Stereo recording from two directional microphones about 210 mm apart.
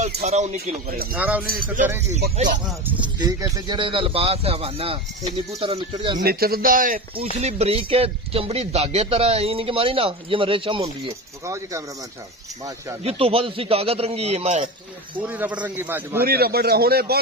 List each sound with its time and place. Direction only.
0.2 s speech: 35° right (ahead or behind)
1.1 s a man's voice: 10° right (ahead or behind)
3.2 s speech: 15° right (ahead or behind)
6.1 s speech: 45° right (ahead or behind)
7.3 s speech: 30° right (ahead or behind)
11.4 s a man's voice: 15° right (ahead or behind)
13.0 s speech: 25° right (ahead or behind)
15.1 s a man's voice: 10° right (ahead or behind)
16.2 s a man's voice: 45° right (ahead or behind)